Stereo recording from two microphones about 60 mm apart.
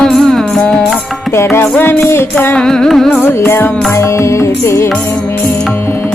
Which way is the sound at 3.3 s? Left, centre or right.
Left.